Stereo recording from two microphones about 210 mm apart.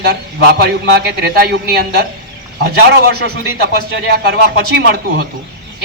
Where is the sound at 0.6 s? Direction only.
50° right (ahead or behind).